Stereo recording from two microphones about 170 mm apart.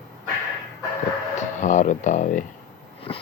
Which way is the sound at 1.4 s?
45° left (ahead or behind).